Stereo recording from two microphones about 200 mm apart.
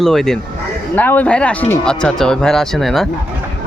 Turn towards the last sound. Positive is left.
turn(degrees=0)  # may be behind; listen again after turning